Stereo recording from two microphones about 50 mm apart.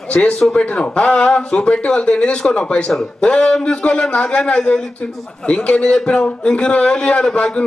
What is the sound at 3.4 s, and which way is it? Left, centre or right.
Speech, centre.